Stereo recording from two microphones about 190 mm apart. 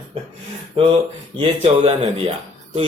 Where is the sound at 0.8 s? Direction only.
30° right (ahead or behind).